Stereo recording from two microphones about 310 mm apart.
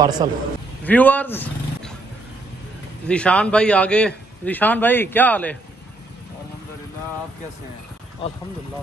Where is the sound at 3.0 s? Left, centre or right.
Centre.